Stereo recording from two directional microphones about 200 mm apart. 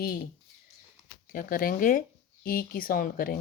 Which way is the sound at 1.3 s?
45° left (ahead or behind).